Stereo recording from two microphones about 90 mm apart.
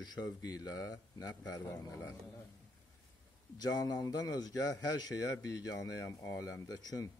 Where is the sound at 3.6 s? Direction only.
45° left (ahead or behind).